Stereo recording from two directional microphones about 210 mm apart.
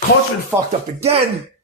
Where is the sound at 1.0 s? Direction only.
30° right (ahead or behind).